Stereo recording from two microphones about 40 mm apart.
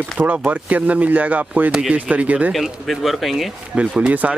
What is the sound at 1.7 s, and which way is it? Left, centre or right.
Speech, right.